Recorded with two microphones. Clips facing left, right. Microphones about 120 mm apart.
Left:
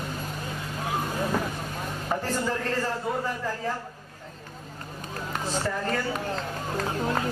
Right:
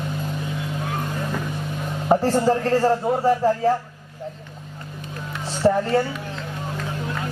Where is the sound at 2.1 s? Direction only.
35° right (ahead or behind).